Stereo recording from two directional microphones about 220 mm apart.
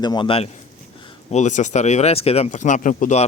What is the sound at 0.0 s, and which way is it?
Speech, 20° left (ahead or behind).